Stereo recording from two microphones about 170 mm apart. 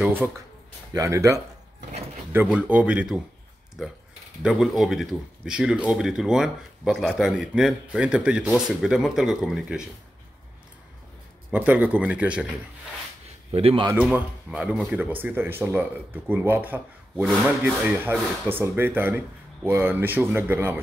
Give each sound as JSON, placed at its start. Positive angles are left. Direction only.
{"t": 0.0, "sound": "speech", "side_deg": -10}
{"t": 2.4, "sound": "speech", "side_deg": -5}
{"t": 4.4, "sound": "speech", "side_deg": 0}
{"t": 11.5, "sound": "speech", "side_deg": -10}
{"t": 13.5, "sound": "speech", "side_deg": -35}
{"t": 13.9, "sound": "speech", "side_deg": -5}